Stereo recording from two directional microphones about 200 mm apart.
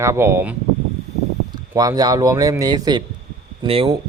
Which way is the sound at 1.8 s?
20° right (ahead or behind).